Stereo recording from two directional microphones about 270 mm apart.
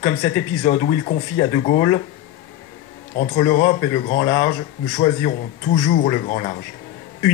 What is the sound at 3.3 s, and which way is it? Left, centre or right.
Speech, left.